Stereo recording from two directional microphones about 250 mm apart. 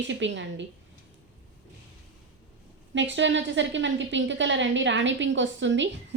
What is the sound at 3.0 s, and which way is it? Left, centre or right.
A woman's voice, right.